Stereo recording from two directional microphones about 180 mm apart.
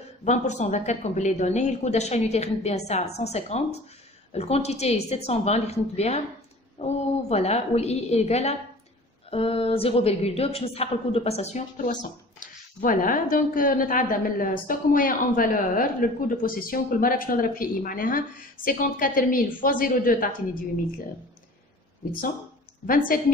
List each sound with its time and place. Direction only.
0.2 s a woman's voice: 40° left (ahead or behind)
22.8 s a woman's voice: 50° left (ahead or behind)